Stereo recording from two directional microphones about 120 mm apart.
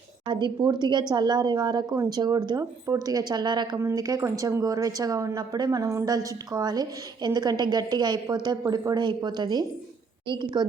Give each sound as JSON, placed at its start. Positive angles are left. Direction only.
{"t": 0.3, "sound": "a woman's voice", "side_deg": -40}
{"t": 3.8, "sound": "a woman's voice", "side_deg": -25}